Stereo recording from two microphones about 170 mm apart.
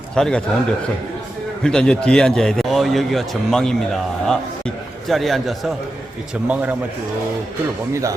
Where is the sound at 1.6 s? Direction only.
5° left (ahead or behind).